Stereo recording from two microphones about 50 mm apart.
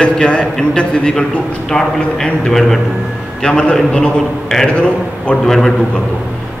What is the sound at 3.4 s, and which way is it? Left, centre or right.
A man's voice, centre.